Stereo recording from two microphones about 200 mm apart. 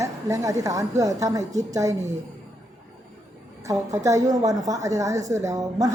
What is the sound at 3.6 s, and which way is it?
A woman's voice, 15° right (ahead or behind).